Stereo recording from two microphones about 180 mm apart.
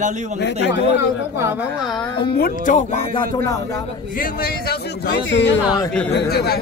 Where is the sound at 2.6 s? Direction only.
45° left (ahead or behind); by 3.8 s 20° left (ahead or behind).